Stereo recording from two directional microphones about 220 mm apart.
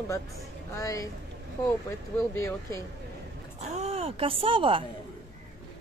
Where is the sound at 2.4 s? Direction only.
10° left (ahead or behind).